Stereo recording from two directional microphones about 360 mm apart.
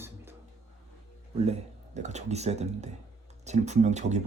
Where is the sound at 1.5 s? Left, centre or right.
Centre.